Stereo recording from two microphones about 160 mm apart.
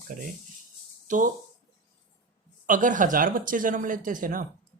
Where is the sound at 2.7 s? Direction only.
55° right (ahead or behind).